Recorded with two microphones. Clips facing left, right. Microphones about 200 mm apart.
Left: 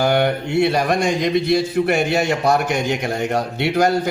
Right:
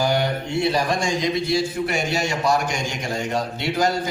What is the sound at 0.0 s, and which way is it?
Speech, 60° left (ahead or behind).